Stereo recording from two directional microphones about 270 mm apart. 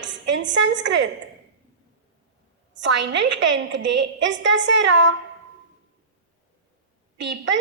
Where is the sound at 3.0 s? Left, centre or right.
Right.